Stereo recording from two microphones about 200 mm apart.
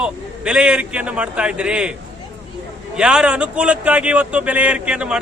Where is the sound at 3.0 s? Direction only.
5° right (ahead or behind).